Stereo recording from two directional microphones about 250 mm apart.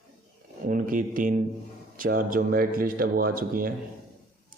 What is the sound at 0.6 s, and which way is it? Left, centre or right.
Speech, right.